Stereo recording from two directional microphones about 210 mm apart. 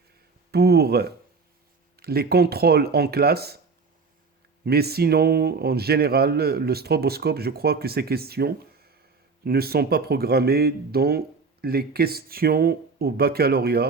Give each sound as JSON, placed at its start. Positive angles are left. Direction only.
{"t": 0.5, "sound": "speech", "side_deg": -50}
{"t": 4.6, "sound": "speech", "side_deg": -50}